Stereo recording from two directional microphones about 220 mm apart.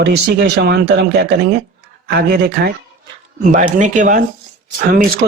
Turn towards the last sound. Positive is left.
turn(degrees=-40)  # may be behind; listen again after turning